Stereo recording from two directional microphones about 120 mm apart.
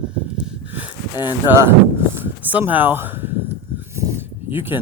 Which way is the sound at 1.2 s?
20° right (ahead or behind).